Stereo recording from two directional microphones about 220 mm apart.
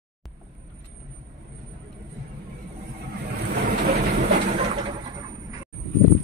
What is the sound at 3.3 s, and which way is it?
Vehicle, 45° right (ahead or behind).